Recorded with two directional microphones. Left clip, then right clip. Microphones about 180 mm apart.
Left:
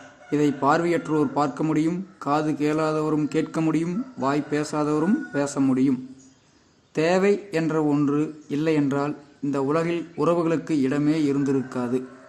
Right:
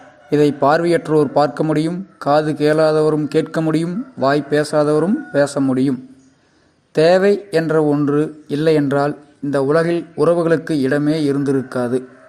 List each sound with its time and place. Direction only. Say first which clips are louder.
0.3 s a man's voice: right 7 dB; 30° right (ahead or behind)